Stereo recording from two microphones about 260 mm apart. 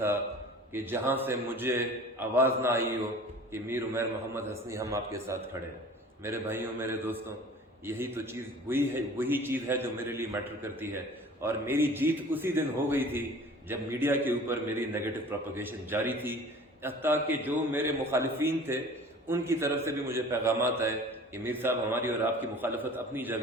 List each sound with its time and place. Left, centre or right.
0.7 s a man's voice: centre
11.4 s a man's voice: centre